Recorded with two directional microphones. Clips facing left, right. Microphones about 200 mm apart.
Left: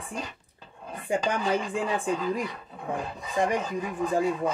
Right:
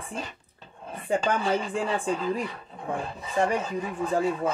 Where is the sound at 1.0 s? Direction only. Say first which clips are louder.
Right 1 dB; 15° left (ahead or behind).